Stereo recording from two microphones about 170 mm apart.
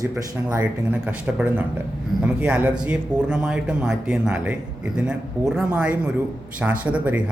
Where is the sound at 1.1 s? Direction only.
10° right (ahead or behind).